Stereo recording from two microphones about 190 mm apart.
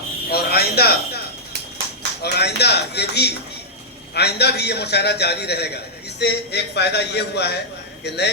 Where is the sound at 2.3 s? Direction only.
60° left (ahead or behind).